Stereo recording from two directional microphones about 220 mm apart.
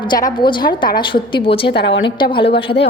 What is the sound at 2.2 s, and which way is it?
Speech, 20° left (ahead or behind).